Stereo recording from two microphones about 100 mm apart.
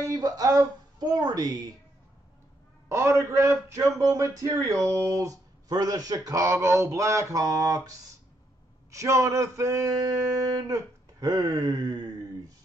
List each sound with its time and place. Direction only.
0.0 s speech: 40° right (ahead or behind)
2.9 s a man's voice: 30° right (ahead or behind)
8.9 s a man's voice: 30° right (ahead or behind)